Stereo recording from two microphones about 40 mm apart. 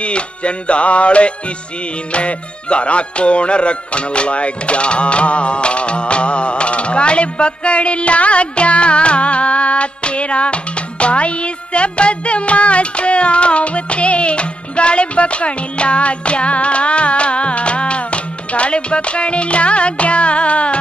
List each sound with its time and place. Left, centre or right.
0.0 s speech: left